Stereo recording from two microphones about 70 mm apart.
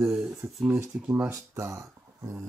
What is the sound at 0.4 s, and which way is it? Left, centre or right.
Speech, right.